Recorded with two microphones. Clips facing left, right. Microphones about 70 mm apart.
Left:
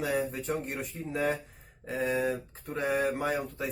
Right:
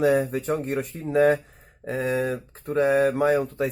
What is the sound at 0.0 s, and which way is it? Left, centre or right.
Speech, right.